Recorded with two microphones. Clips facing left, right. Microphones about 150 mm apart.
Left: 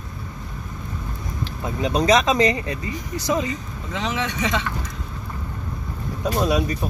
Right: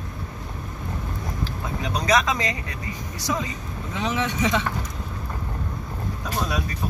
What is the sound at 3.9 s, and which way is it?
Speech, 65° left (ahead or behind).